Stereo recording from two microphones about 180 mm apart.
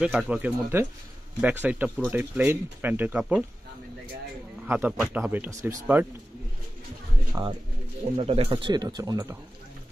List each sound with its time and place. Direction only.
0.0 s speech: centre (ahead or behind)
4.6 s speech: 10° right (ahead or behind)
7.4 s speech: 15° right (ahead or behind)
8.2 s speech: 35° right (ahead or behind)